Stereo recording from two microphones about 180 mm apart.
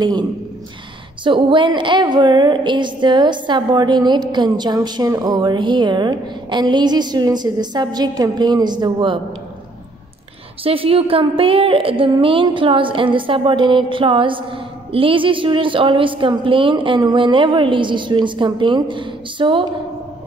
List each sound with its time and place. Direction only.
1.2 s a woman's voice: 25° right (ahead or behind)
10.6 s a woman's voice: 30° right (ahead or behind)